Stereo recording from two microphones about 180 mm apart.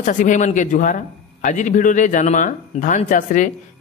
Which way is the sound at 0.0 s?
45° left (ahead or behind).